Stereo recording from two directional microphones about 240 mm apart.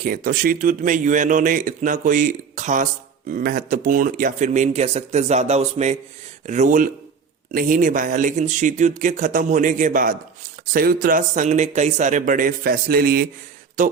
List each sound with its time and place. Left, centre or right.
0.0 s speech: right